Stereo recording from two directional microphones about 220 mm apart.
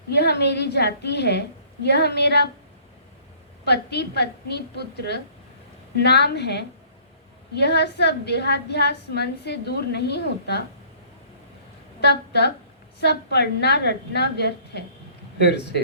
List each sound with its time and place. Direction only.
0.1 s a woman's voice: 50° left (ahead or behind)
3.6 s a woman's voice: 50° left (ahead or behind)
11.9 s a woman's voice: 50° left (ahead or behind)